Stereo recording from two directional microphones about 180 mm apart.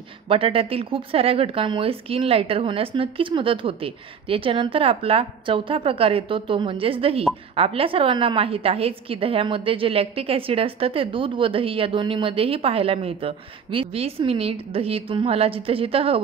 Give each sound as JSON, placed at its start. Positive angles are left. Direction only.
{"t": 0.3, "sound": "a woman's voice", "side_deg": -30}